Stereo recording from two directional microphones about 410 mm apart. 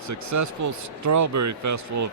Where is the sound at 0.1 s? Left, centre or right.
Right.